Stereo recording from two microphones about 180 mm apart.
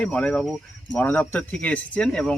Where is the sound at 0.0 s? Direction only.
5° left (ahead or behind).